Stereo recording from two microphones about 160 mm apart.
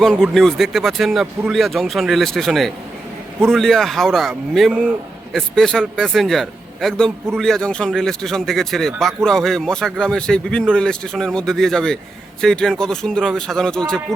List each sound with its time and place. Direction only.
0.0 s a man's voice: 5° left (ahead or behind)